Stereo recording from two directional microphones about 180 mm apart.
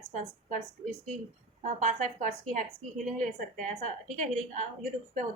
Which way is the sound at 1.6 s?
45° right (ahead or behind).